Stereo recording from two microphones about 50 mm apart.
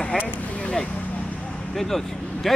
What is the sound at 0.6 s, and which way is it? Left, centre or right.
Vehicle, centre.